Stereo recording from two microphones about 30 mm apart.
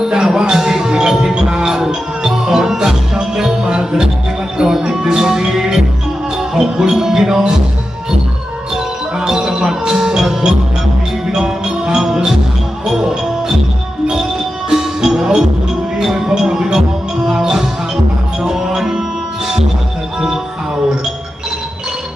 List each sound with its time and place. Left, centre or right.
0.0 s music: centre
8.7 s music: right
14.7 s music: centre